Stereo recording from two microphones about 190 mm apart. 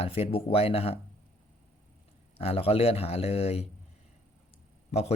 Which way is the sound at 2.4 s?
30° left (ahead or behind).